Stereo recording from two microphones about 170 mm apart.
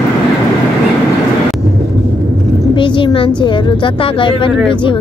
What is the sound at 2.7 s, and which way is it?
A woman's voice, 30° left (ahead or behind).